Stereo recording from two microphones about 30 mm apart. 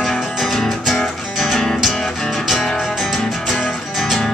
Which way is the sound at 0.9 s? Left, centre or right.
Centre.